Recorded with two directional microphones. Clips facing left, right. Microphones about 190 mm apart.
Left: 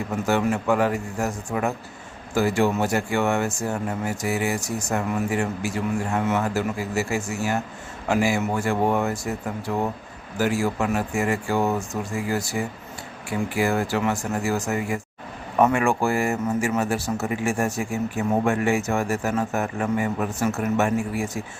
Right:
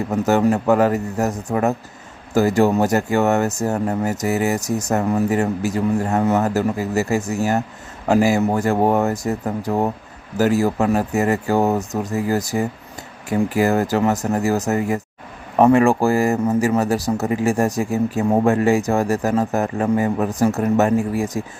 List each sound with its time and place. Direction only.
0.1 s speech: 40° right (ahead or behind)